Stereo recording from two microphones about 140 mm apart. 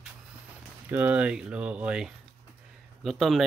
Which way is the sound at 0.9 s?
10° right (ahead or behind).